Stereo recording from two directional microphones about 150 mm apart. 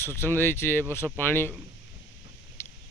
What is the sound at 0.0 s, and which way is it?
Speech, 15° left (ahead or behind).